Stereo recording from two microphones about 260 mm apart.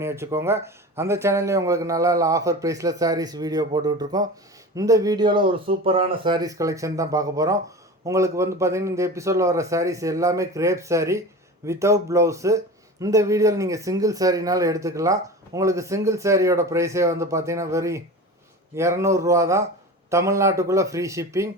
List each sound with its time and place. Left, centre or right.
0.0 s speech: centre